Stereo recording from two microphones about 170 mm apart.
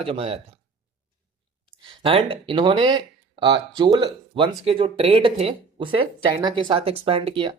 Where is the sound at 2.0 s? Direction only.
30° right (ahead or behind).